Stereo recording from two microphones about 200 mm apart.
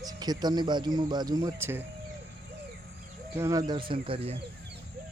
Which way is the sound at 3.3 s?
15° right (ahead or behind).